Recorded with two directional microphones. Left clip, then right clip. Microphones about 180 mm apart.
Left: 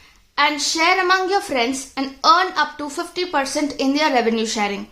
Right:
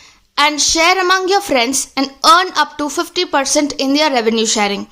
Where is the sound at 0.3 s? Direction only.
35° right (ahead or behind).